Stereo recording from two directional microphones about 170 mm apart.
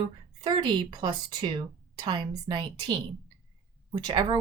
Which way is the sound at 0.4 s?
25° right (ahead or behind).